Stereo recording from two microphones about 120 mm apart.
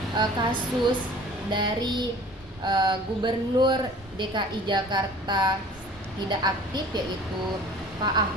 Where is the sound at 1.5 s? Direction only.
40° right (ahead or behind).